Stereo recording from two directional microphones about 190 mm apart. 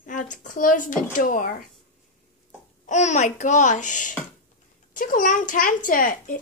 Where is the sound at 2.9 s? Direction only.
40° left (ahead or behind).